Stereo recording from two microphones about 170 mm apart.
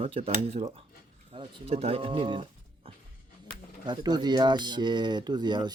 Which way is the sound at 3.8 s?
25° right (ahead or behind).